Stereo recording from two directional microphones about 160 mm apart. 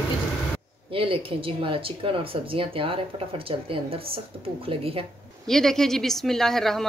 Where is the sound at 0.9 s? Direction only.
35° right (ahead or behind).